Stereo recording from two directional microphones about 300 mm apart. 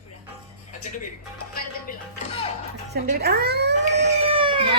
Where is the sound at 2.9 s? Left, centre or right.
Right.